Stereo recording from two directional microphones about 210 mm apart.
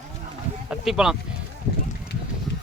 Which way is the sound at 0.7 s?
5° right (ahead or behind).